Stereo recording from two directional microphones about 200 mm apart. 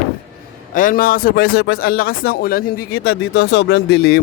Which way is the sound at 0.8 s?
45° left (ahead or behind).